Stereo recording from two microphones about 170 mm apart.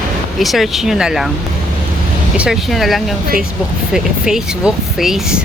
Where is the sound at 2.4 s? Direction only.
Centre (ahead or behind).